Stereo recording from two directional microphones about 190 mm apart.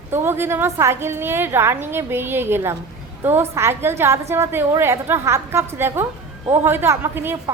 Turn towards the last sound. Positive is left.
turn(degrees=-10)  # may be behind; listen again after turning